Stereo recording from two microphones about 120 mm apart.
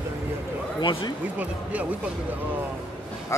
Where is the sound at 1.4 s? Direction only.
15° right (ahead or behind).